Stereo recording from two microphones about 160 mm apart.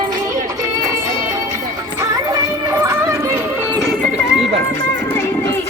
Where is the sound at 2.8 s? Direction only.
20° right (ahead or behind).